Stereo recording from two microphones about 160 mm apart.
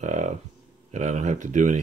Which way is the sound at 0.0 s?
50° right (ahead or behind).